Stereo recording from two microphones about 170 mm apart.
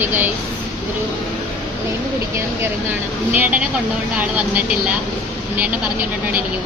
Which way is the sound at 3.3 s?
10° right (ahead or behind).